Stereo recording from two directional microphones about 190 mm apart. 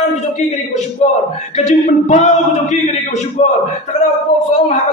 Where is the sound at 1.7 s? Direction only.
40° left (ahead or behind).